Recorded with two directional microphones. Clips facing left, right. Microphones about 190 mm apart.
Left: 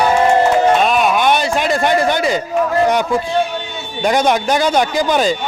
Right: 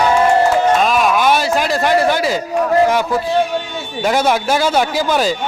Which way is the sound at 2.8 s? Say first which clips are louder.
Even; 5° right (ahead or behind).